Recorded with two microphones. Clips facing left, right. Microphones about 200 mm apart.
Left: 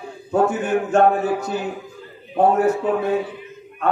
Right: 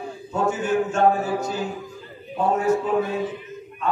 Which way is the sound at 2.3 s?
60° left (ahead or behind).